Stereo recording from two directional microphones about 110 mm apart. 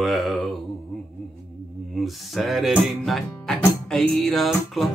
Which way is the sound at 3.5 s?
5° left (ahead or behind).